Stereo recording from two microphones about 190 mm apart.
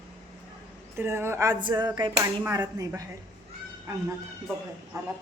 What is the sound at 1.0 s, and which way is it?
A woman's voice, 15° right (ahead or behind).